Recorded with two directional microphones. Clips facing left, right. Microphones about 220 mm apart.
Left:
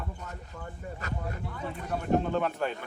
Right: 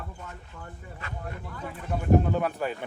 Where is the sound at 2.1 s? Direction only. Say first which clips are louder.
Right 3 dB; 5° right (ahead or behind).